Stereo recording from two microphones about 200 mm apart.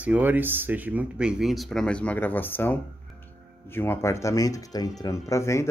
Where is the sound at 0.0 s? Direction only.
10° right (ahead or behind).